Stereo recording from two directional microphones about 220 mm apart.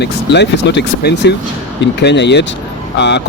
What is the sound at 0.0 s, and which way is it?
Speech, 50° left (ahead or behind).